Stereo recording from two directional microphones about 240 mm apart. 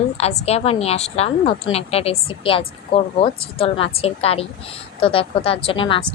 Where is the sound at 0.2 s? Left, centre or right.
Left.